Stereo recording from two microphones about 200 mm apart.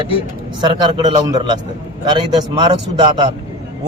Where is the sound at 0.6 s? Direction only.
20° right (ahead or behind).